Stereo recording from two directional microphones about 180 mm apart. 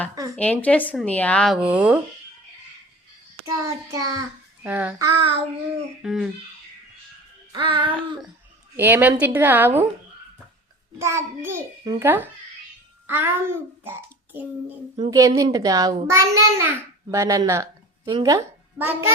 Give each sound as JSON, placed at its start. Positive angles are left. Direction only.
{"t": 0.3, "sound": "speech", "side_deg": 10}
{"t": 1.6, "sound": "a child's voice", "side_deg": -5}
{"t": 3.4, "sound": "a child's voice", "side_deg": -20}
{"t": 7.5, "sound": "a woman's voice", "side_deg": -25}
{"t": 8.7, "sound": "a child's voice", "side_deg": -10}
{"t": 11.0, "sound": "a child's voice", "side_deg": -15}
{"t": 14.9, "sound": "a woman's voice", "side_deg": -25}
{"t": 18.8, "sound": "a child's voice", "side_deg": -10}